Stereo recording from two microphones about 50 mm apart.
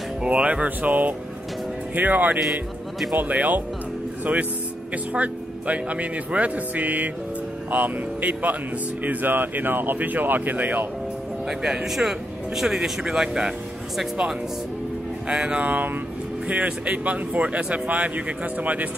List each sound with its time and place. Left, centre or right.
0.2 s speech: right
11.4 s speech: centre
15.2 s speech: right
15.6 s speech: right